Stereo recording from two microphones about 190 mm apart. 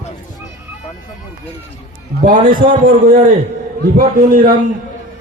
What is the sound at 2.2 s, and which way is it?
A man's voice, 45° right (ahead or behind).